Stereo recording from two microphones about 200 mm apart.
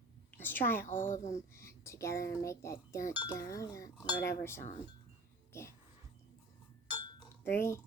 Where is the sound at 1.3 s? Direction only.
15° left (ahead or behind).